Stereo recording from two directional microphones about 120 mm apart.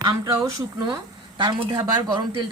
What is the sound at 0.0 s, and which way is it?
Speech, 30° right (ahead or behind).